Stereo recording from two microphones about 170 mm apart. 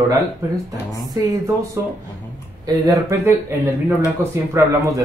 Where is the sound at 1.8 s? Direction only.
15° right (ahead or behind).